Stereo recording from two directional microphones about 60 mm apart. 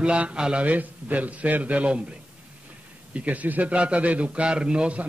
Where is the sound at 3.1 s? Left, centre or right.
Right.